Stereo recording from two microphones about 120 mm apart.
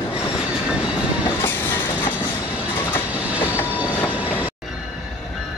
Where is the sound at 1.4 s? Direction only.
15° left (ahead or behind).